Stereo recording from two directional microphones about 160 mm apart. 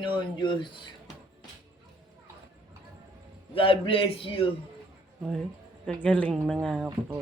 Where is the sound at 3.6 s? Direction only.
35° left (ahead or behind).